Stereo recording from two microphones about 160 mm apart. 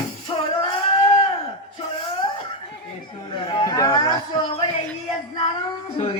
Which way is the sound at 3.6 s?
20° left (ahead or behind).